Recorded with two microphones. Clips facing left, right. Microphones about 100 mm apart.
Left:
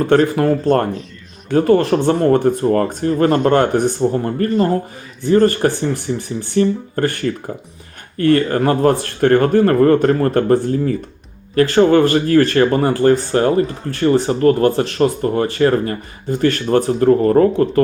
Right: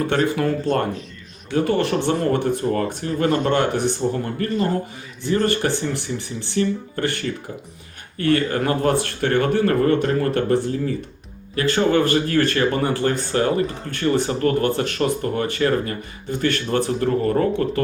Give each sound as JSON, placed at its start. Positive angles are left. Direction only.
{"t": 0.1, "sound": "speech", "side_deg": 40}
{"t": 8.2, "sound": "speech", "side_deg": 40}